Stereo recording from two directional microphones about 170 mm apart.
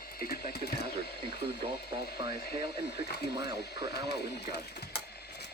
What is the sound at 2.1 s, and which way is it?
Speech, 25° right (ahead or behind).